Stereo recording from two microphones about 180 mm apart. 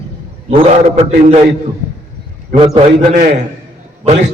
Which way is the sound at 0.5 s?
35° right (ahead or behind).